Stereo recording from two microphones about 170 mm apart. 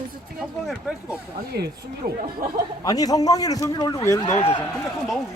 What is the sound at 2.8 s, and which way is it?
A man's voice, 20° left (ahead or behind).